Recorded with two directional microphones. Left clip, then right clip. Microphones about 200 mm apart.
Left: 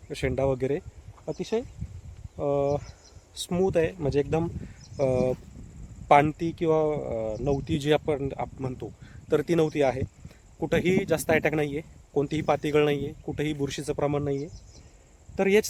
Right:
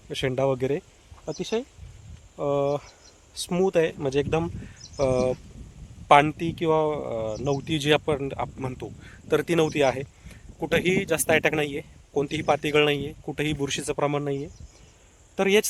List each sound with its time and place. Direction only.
0.1 s speech: 20° right (ahead or behind); by 15.6 s centre (ahead or behind)